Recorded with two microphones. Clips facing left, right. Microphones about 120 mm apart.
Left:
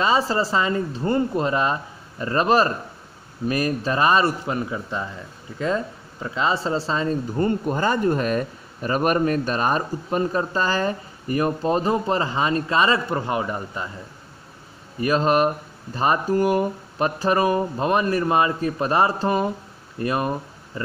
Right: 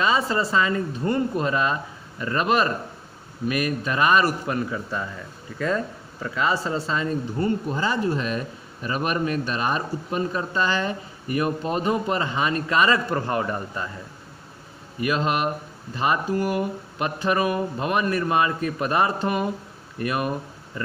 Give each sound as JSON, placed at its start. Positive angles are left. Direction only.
{"t": 0.0, "sound": "speech", "side_deg": 30}
{"t": 6.2, "sound": "speech", "side_deg": 25}
{"t": 15.0, "sound": "speech", "side_deg": 35}